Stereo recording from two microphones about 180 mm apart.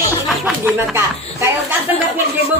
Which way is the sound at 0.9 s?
15° right (ahead or behind).